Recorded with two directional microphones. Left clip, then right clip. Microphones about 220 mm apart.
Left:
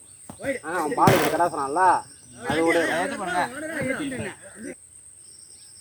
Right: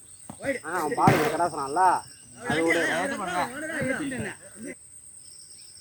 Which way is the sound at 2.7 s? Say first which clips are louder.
Left 2 dB; centre (ahead or behind).